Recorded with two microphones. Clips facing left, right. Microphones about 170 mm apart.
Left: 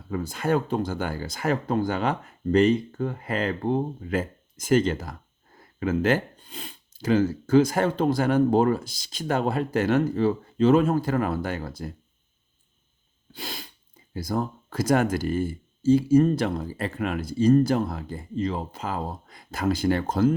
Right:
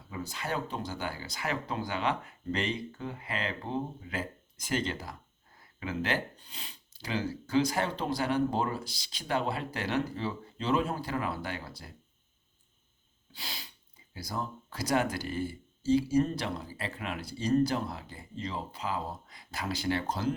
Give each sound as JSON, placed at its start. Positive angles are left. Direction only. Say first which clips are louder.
{"t": 0.1, "sound": "speech", "louder": "left 11 dB", "side_deg": 50}
{"t": 13.3, "sound": "speech", "louder": "left 8 dB", "side_deg": 50}